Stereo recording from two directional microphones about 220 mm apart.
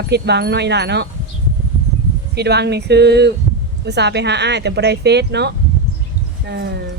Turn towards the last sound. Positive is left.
turn(degrees=-50)  # may be behind; listen again after turning